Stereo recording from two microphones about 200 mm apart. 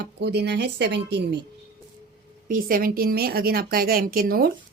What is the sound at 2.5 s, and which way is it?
A woman's voice, 45° right (ahead or behind).